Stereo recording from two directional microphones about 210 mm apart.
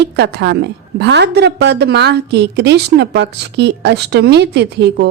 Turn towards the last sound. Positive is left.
turn(degrees=-55)  # may be behind; listen again after turning